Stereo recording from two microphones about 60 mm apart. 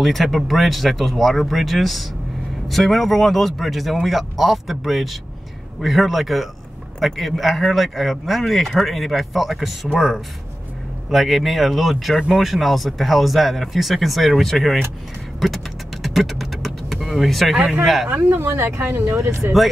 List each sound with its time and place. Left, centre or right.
0.0 s speech: centre
15.4 s vehicle: centre
18.1 s speech: right